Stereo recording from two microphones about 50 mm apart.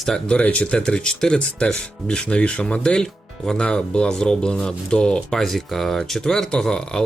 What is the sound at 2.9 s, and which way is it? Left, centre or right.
Speech, centre.